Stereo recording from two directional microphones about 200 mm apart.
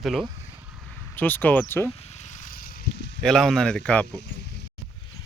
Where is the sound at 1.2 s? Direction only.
10° left (ahead or behind).